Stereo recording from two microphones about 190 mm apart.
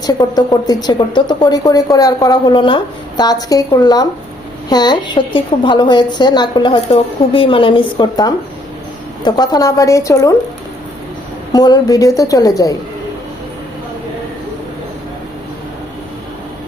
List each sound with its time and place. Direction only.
0.0 s a woman's voice: 20° left (ahead or behind)
11.5 s a woman's voice: 20° left (ahead or behind)